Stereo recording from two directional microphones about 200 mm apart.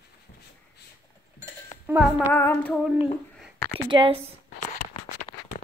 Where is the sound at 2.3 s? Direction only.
10° left (ahead or behind).